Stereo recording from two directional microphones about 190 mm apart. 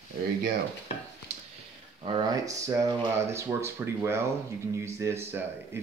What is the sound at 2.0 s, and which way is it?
Speech, 20° right (ahead or behind).